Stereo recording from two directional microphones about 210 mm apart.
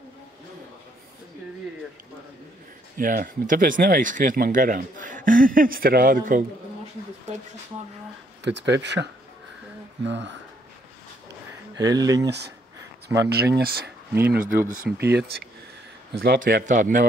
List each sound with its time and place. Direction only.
3.0 s speech: 40° right (ahead or behind)
8.5 s speech: 55° right (ahead or behind)
11.8 s speech: 15° right (ahead or behind)
12.3 s speech: 50° right (ahead or behind)
14.9 s speech: 10° right (ahead or behind)
16.2 s speech: 45° right (ahead or behind)